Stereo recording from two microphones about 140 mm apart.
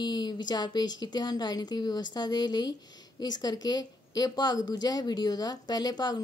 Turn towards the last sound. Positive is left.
turn(degrees=30)  # may be behind; listen again after turning